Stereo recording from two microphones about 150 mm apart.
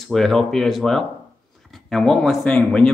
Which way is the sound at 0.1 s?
Centre (ahead or behind).